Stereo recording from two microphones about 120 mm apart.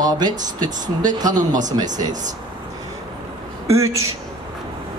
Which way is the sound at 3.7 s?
25° right (ahead or behind).